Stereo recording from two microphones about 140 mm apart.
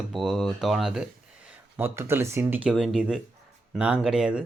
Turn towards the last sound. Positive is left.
turn(degrees=-5)  # may be behind; listen again after turning